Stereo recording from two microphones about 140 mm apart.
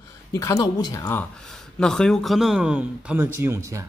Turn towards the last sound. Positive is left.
turn(degrees=-20)  # may be behind; listen again after turning